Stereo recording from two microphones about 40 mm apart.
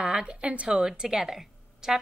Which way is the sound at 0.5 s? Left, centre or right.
Right.